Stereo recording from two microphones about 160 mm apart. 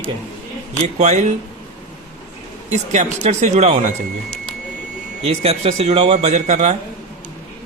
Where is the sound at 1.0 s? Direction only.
45° right (ahead or behind).